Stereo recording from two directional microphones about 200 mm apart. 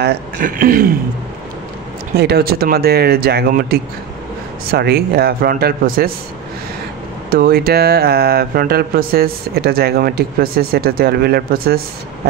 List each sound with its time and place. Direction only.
0.0 s speech: 50° right (ahead or behind)
2.1 s speech: 55° right (ahead or behind)
7.2 s speech: 50° right (ahead or behind)